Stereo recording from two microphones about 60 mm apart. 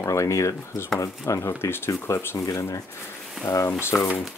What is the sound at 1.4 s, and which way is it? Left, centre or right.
Speech, left.